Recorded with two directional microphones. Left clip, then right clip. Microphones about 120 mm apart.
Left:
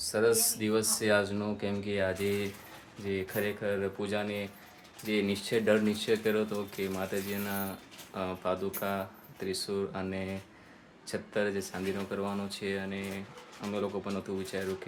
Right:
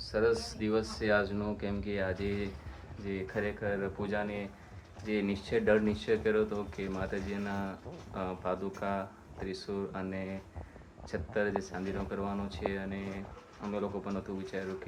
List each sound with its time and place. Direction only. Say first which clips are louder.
0.1 s speech: left 2 dB; 30° left (ahead or behind)
1.0 s speech: left 1 dB; 20° left (ahead or behind)